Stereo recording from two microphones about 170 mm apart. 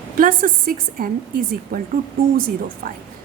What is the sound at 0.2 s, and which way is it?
Speech, 55° right (ahead or behind).